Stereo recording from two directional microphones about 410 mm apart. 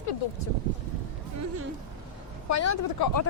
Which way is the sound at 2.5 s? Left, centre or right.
Left.